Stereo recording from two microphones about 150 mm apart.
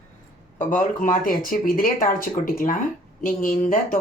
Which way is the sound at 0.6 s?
60° left (ahead or behind).